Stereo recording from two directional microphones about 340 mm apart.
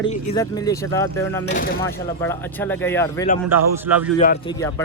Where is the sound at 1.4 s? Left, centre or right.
Left.